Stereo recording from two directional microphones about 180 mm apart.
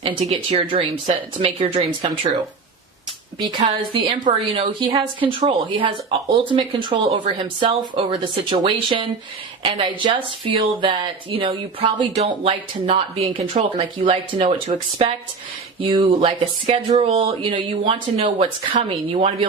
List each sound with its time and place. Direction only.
0.0 s speech: 30° right (ahead or behind)
3.6 s speech: 25° right (ahead or behind)